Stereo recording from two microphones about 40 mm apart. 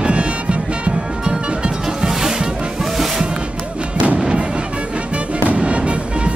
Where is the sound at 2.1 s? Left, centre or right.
Centre.